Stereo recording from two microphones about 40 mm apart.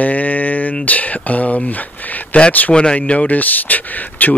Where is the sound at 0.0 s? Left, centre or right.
Left.